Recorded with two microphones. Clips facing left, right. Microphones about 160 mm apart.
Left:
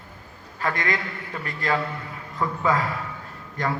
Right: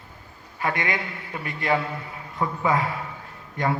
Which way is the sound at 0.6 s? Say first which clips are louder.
Even; 25° right (ahead or behind).